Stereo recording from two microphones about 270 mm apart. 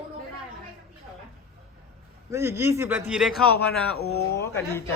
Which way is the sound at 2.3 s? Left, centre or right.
Centre.